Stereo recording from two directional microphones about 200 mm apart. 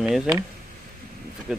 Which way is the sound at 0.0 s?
Centre (ahead or behind).